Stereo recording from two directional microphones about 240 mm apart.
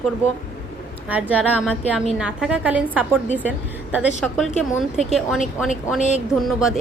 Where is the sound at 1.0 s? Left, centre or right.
Centre.